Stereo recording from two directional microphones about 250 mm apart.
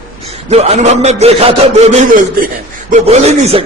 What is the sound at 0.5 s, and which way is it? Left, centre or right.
A man's voice, right.